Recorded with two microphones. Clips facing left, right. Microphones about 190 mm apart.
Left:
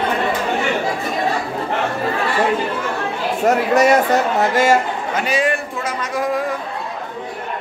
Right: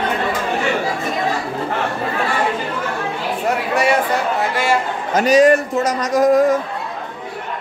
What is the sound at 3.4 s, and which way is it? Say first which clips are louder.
Chatter: left 4 dB; 45° left (ahead or behind).